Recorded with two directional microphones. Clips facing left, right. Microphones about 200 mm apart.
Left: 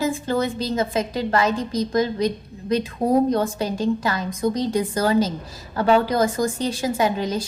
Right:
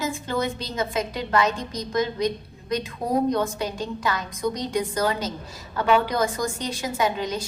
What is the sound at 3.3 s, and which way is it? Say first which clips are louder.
A woman's voice: left 3 dB; 30° left (ahead or behind).